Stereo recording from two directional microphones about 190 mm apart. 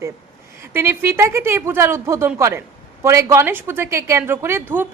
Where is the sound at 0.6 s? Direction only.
10° right (ahead or behind).